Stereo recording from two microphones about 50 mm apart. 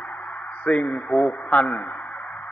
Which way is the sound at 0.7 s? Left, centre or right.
Left.